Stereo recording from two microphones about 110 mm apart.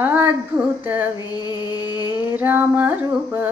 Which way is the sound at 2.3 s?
20° right (ahead or behind).